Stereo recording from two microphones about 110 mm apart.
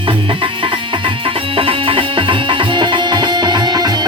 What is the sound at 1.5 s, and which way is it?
Music, 55° right (ahead or behind).